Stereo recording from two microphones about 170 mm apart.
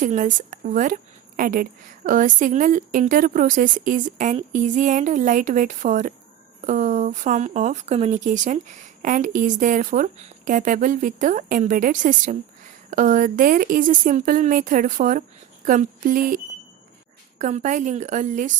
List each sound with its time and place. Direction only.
0.0 s a woman's voice: 50° right (ahead or behind)